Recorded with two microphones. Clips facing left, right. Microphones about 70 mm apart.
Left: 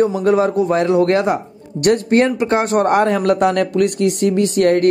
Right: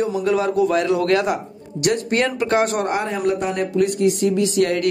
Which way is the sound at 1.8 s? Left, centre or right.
Left.